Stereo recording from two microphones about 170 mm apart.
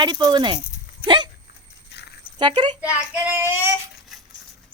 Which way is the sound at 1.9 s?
75° left (ahead or behind).